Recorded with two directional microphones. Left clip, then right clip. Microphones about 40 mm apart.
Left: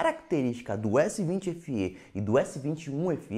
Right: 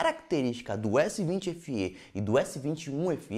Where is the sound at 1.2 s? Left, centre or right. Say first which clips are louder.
Even; right.